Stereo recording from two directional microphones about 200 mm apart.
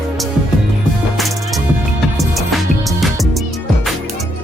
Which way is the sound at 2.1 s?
Centre (ahead or behind).